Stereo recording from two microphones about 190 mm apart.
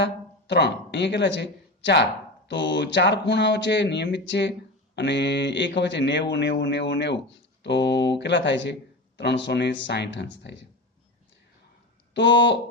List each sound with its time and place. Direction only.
0.0 s speech: 65° left (ahead or behind)
12.1 s speech: 65° left (ahead or behind)